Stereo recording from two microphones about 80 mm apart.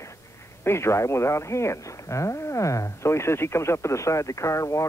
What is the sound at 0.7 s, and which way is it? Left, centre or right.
Speech, left.